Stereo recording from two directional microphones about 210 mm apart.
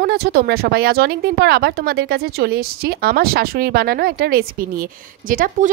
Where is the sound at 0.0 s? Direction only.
50° right (ahead or behind).